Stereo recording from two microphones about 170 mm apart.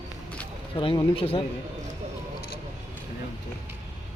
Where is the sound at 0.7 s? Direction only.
25° left (ahead or behind).